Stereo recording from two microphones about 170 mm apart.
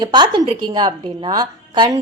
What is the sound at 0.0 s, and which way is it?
A woman's voice, 25° right (ahead or behind).